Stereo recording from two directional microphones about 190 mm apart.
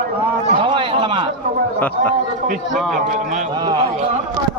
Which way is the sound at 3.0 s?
40° right (ahead or behind).